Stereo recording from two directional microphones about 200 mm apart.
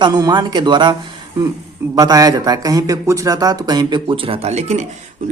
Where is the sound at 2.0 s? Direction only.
20° right (ahead or behind); by 4.9 s 35° right (ahead or behind).